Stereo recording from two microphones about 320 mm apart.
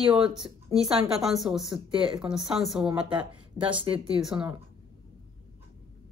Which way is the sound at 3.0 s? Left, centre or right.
Centre.